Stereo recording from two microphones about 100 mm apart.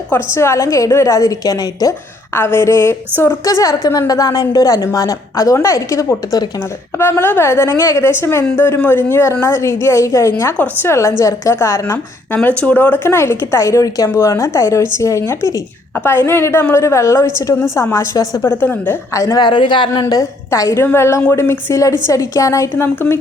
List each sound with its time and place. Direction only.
0.1 s a woman's voice: 25° left (ahead or behind)
2.3 s a woman's voice: 20° left (ahead or behind)
7.0 s a woman's voice: 25° left (ahead or behind)
12.3 s a woman's voice: 15° left (ahead or behind)
19.1 s a woman's voice: 35° left (ahead or behind)
19.4 s speech: 55° left (ahead or behind)
19.9 s a woman's voice: 40° left (ahead or behind)
22.7 s a woman's voice: 20° left (ahead or behind)